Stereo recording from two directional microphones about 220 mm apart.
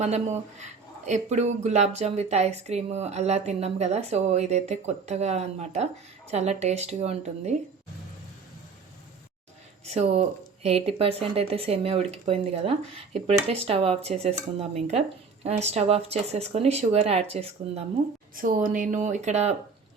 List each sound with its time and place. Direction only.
0.0 s speech: 30° right (ahead or behind)
9.8 s speech: 30° right (ahead or behind)
18.3 s speech: 40° right (ahead or behind)